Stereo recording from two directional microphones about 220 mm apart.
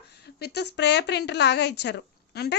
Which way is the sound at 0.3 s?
50° left (ahead or behind).